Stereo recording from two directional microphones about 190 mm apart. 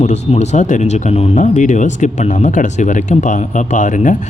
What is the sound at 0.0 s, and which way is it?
Speech, 35° left (ahead or behind).